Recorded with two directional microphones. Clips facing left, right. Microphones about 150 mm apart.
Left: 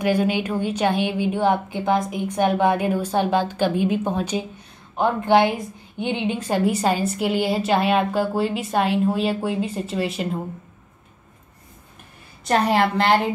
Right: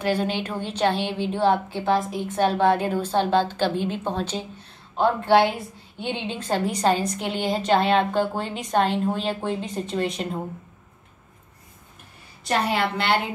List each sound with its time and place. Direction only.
0.0 s a woman's voice: 10° left (ahead or behind)
12.4 s a woman's voice: 40° left (ahead or behind)